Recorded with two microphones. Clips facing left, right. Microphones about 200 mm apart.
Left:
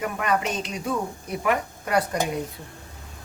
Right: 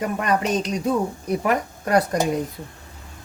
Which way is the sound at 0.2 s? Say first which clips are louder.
Right 3 dB; 40° right (ahead or behind).